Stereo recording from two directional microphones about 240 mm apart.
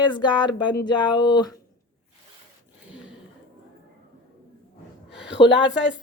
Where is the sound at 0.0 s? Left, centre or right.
Centre.